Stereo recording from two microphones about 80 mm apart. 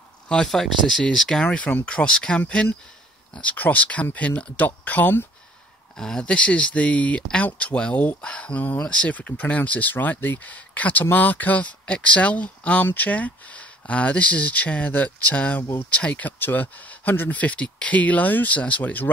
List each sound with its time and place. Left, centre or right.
0.3 s speech: centre
5.9 s speech: centre